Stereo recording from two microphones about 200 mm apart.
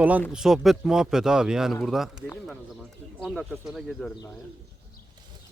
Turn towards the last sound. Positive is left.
turn(degrees=0)  # may be behind; listen again after turning